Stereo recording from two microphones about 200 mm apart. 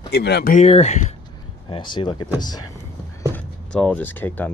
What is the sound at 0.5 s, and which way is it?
Speech, 30° left (ahead or behind).